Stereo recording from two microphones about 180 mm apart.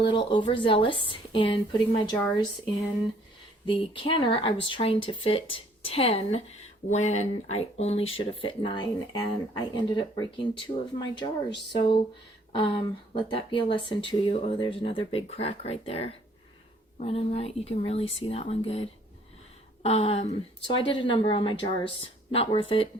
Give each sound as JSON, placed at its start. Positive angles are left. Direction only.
{"t": 0.0, "sound": "speech", "side_deg": 25}
{"t": 2.1, "sound": "a woman's voice", "side_deg": 15}
{"t": 3.7, "sound": "speech", "side_deg": 30}